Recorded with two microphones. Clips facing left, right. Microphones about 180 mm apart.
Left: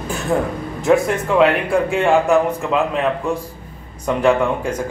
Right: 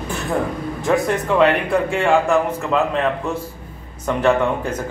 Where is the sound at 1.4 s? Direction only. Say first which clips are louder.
Left 1 dB; 15° left (ahead or behind).